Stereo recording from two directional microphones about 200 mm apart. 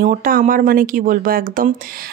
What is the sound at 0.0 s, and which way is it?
Speech, 45° right (ahead or behind).